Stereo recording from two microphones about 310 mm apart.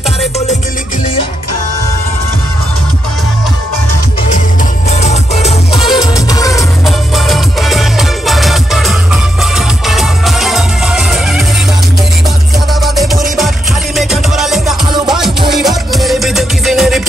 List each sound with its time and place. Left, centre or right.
4.8 s music: left
7.2 s music: centre
12.8 s music: centre